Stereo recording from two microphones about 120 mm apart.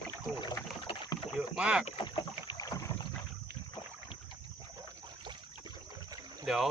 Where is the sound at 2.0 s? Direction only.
40° left (ahead or behind).